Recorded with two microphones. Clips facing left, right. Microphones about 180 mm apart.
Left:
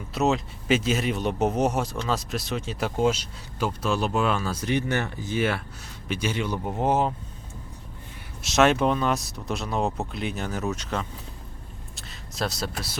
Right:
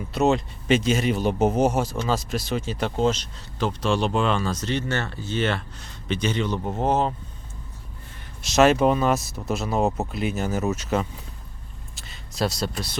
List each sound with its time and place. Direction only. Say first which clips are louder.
0.1 s speech: right 3 dB; centre (ahead or behind)
8.4 s speech: right 3 dB; centre (ahead or behind)
11.9 s vehicle: right 4 dB; centre (ahead or behind)